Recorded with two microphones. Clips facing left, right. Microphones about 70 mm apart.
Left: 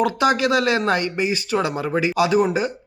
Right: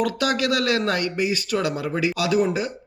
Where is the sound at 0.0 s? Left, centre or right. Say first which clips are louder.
Left 4 dB; left.